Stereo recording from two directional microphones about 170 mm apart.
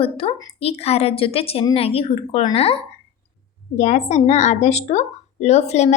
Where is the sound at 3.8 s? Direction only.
45° left (ahead or behind).